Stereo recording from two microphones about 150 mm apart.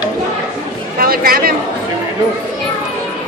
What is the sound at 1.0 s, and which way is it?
Chatter, 80° right.